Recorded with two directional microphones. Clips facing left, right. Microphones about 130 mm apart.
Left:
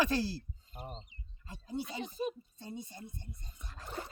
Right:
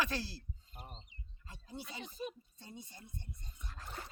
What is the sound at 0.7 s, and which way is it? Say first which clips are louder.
Speech: left 8 dB; 55° left (ahead or behind).